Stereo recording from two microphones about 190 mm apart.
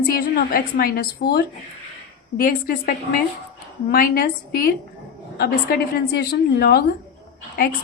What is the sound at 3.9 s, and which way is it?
A woman's voice, 50° left (ahead or behind).